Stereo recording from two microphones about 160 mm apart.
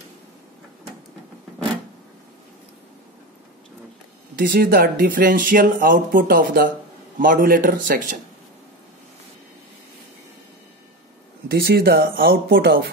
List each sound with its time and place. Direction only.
4.4 s speech: 65° right (ahead or behind)
11.4 s speech: 80° right